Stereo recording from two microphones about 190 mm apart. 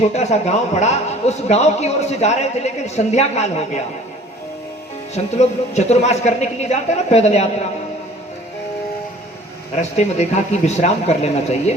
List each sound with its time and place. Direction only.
0.0 s a man's voice: 35° left (ahead or behind)
5.1 s a man's voice: 35° left (ahead or behind)
9.7 s a man's voice: 35° left (ahead or behind)